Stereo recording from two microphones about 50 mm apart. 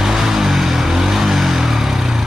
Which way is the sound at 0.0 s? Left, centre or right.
Centre.